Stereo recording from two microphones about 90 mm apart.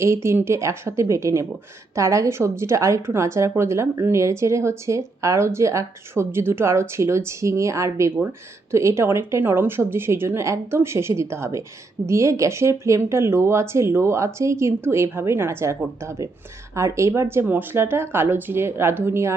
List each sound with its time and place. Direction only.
0.0 s a woman's voice: 30° right (ahead or behind)